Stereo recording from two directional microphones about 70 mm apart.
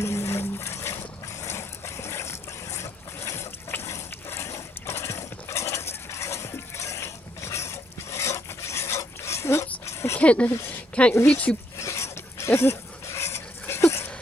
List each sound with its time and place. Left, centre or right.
0.0 s vehicle: left
10.1 s speech: centre
11.8 s dog: left